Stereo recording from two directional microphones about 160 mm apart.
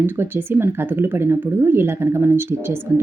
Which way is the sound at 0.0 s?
15° right (ahead or behind).